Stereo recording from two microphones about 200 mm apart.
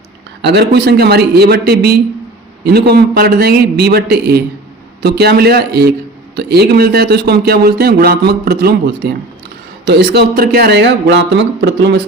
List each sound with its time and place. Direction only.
0.4 s a man's voice: 55° right (ahead or behind)